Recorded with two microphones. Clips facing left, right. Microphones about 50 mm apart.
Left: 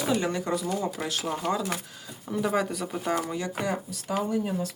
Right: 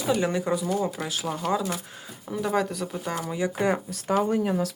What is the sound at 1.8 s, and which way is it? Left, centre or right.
Speech, right.